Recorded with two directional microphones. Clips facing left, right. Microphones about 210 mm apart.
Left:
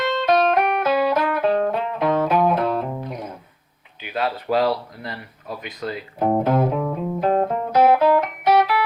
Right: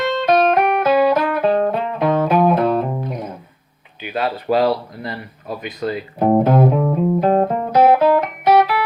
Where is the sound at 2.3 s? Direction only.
45° right (ahead or behind).